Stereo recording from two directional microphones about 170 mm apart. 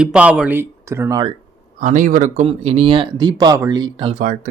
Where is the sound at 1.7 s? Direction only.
50° right (ahead or behind).